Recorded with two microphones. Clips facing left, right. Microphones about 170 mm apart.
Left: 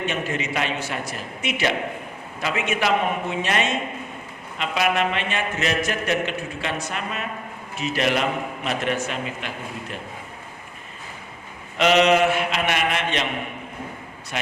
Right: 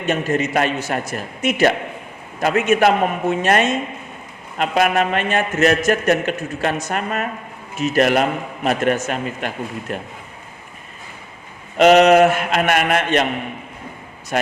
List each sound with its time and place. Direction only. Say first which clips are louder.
0.0 s a man's voice: right 7 dB; 45° right (ahead or behind)
11.8 s a man's voice: right 7 dB; 45° right (ahead or behind)